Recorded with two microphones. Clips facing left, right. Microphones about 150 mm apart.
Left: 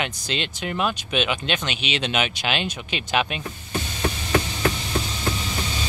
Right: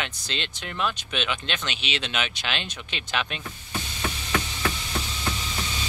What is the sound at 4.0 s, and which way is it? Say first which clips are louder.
Insect: left 5 dB; 40° left (ahead or behind).